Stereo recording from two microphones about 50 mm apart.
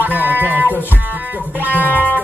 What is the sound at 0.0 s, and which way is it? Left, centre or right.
Music, right.